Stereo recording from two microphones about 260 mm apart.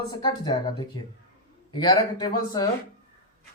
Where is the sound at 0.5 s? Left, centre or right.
Centre.